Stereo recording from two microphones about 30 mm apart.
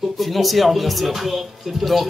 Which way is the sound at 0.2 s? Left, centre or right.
Centre.